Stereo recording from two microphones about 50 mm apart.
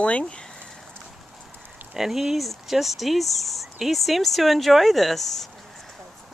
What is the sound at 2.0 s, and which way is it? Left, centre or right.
Speech, centre.